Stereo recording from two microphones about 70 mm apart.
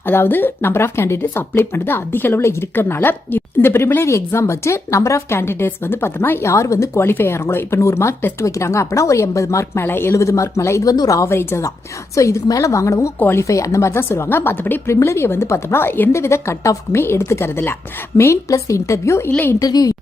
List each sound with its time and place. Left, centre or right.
0.0 s speech: left
6.5 s speech: left
9.8 s speech: left
10.2 s speech: left
10.9 s a woman's voice: left
11.3 s speech: left
13.1 s speech: left
13.4 s speech: left
14.8 s speech: left
16.1 s speech: left
18.4 s speech: left
19.5 s a woman's voice: left